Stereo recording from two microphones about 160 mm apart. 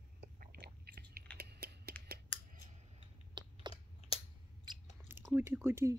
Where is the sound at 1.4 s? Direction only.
85° right.